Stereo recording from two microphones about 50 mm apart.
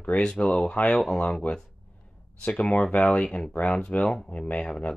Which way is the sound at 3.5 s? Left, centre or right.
Left.